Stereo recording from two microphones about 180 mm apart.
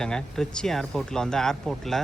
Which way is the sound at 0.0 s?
5° left (ahead or behind).